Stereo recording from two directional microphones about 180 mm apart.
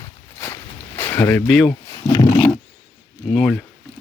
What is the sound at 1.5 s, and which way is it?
Speech, 5° left (ahead or behind).